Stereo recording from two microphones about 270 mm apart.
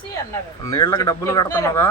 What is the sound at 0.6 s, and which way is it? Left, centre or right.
A man's voice, centre.